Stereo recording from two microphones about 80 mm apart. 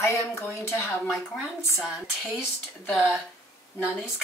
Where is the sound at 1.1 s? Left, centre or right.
Centre.